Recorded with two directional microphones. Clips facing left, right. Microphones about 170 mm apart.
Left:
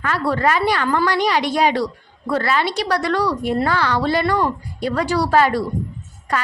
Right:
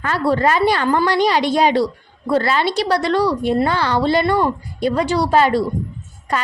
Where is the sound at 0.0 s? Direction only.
30° right (ahead or behind).